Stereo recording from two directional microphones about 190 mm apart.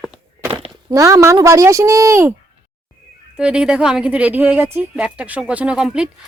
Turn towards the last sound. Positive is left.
turn(degrees=-5)  # may be behind; listen again after turning